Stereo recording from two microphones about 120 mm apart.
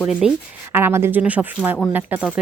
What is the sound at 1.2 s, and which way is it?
Speech, 10° right (ahead or behind).